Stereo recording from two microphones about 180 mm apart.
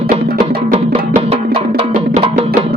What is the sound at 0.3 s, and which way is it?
Music, 55° right (ahead or behind).